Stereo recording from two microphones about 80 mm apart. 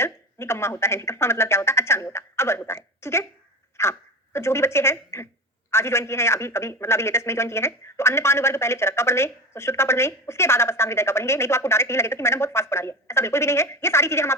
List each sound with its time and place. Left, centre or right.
0.0 s a man's voice: left